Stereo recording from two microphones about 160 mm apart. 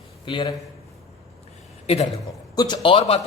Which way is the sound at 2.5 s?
25° left (ahead or behind).